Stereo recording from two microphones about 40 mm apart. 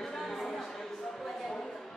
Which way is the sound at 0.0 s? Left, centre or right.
Centre.